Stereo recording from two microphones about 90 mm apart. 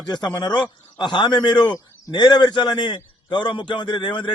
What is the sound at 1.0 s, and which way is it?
A man's voice, 55° left (ahead or behind).